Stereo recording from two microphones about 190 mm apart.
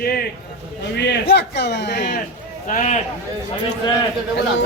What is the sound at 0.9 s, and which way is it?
A man's voice, 65° left (ahead or behind).